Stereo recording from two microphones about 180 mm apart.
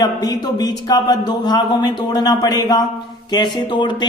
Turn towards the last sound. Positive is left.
turn(degrees=25)  # may be behind; listen again after turning